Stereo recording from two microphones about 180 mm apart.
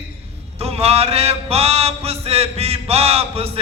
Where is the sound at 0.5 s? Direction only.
35° right (ahead or behind).